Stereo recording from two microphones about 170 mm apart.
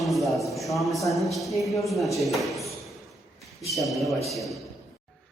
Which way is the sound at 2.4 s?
Centre (ahead or behind).